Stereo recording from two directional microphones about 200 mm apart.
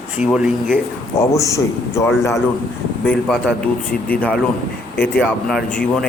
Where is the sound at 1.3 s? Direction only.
15° left (ahead or behind).